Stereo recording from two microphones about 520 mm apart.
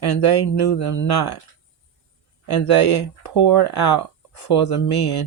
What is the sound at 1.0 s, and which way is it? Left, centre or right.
Speech, left.